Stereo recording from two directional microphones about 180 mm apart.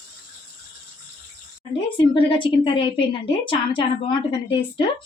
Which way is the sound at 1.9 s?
25° left (ahead or behind).